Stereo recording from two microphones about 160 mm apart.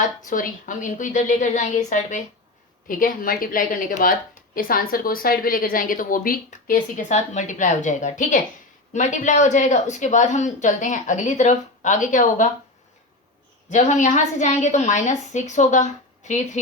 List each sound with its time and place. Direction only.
0.3 s a woman's voice: 55° left (ahead or behind)
13.7 s a woman's voice: 50° left (ahead or behind)